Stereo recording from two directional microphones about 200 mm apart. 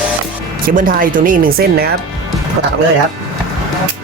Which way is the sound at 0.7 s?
45° right (ahead or behind).